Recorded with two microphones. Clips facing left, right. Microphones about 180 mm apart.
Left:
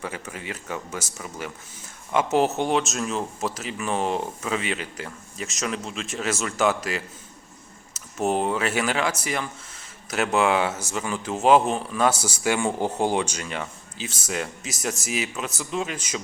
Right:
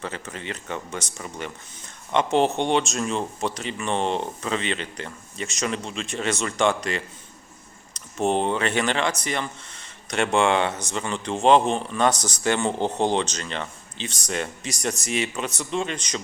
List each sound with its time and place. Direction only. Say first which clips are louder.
0.0 s speech: even; 10° left (ahead or behind)